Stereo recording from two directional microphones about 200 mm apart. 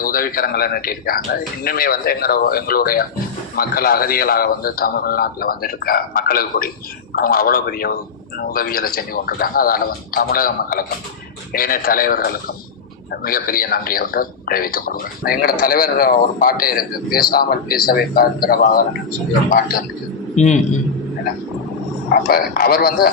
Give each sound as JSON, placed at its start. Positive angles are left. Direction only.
{"t": 0.0, "sound": "speech", "side_deg": 45}
{"t": 20.3, "sound": "a man's voice", "side_deg": 35}
{"t": 22.2, "sound": "speech", "side_deg": 50}